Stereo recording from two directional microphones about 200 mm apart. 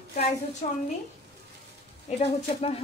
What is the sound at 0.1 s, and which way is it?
Speech, 35° left (ahead or behind).